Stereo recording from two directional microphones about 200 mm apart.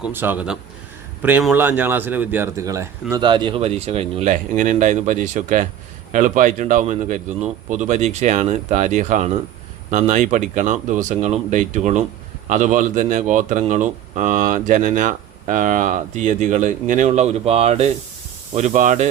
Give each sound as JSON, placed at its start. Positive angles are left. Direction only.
{"t": 0.0, "sound": "speech", "side_deg": -10}